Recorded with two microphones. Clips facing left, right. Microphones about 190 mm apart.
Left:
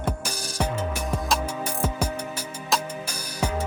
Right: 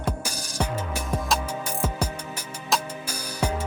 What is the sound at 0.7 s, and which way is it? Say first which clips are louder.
Music: left 2 dB; 5° right (ahead or behind).